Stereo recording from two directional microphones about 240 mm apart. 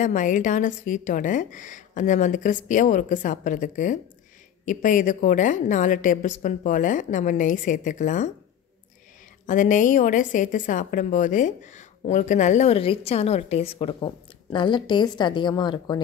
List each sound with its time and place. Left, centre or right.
0.0 s a woman's voice: left
9.5 s a woman's voice: left; by 16.0 s centre